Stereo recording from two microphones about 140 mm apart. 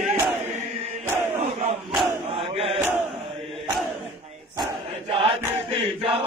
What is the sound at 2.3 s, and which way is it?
Chant, 45° right (ahead or behind).